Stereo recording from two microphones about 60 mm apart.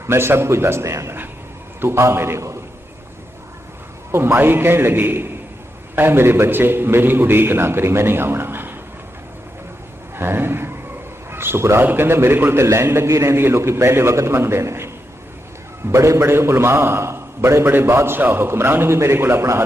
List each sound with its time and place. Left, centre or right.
0.1 s a man's voice: right
4.1 s a man's voice: right
10.2 s a sound: right
11.8 s a man's voice: right
12.6 s a man's voice: right
13.3 s a man's voice: right
15.9 s a man's voice: right